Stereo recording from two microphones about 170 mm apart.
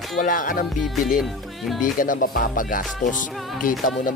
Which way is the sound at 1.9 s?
55° left (ahead or behind).